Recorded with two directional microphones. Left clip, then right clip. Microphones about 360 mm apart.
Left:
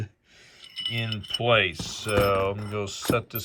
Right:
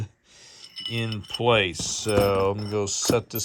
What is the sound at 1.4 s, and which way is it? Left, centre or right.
Speech, centre.